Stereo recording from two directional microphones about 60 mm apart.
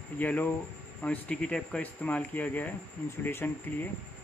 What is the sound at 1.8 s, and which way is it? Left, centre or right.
Speech, left.